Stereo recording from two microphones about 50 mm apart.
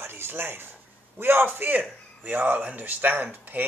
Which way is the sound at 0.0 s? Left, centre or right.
Right.